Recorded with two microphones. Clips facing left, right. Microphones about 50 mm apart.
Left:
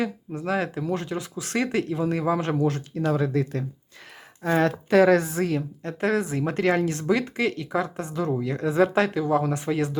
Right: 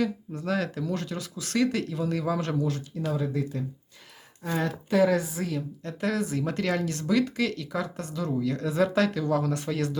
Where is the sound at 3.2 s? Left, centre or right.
Left.